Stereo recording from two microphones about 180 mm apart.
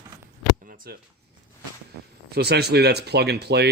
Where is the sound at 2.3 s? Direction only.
65° right (ahead or behind).